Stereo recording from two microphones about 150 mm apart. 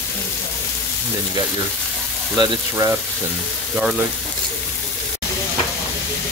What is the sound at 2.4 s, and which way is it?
Speech, 25° right (ahead or behind).